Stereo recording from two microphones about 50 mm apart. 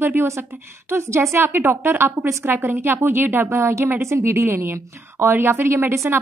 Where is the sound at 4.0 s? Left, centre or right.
Right.